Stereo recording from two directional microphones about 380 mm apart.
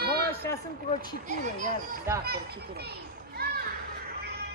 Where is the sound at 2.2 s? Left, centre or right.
Right.